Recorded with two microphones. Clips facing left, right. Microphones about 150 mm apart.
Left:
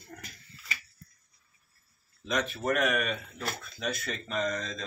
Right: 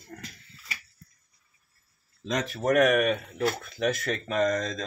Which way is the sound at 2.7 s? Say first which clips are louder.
Right 8 dB; 50° right (ahead or behind).